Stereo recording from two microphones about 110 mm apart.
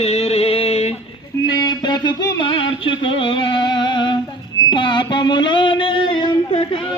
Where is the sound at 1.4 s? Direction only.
40° left (ahead or behind).